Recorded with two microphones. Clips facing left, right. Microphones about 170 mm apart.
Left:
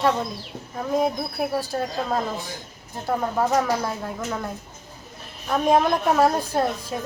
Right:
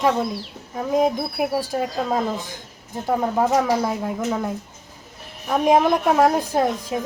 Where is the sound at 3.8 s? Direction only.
15° right (ahead or behind).